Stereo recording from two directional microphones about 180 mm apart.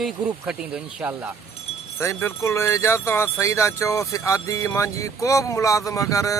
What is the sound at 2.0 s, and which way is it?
Speech, 15° left (ahead or behind).